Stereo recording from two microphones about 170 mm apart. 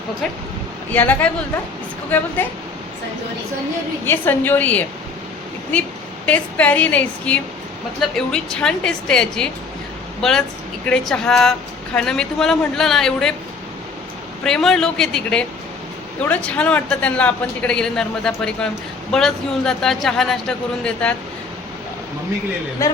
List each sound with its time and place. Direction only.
0.9 s speech: 10° left (ahead or behind)
4.0 s speech: 10° left (ahead or behind)
6.2 s a woman's voice: 10° left (ahead or behind)
14.4 s speech: 5° left (ahead or behind)
22.8 s a man's voice: 20° left (ahead or behind)